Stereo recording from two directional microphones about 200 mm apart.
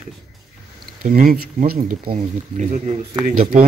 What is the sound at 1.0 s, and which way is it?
Speech, 45° right (ahead or behind).